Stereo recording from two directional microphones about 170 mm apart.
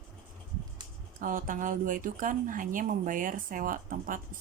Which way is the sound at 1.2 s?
50° right (ahead or behind).